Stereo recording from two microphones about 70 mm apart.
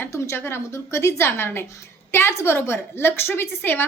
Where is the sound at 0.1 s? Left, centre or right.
Left.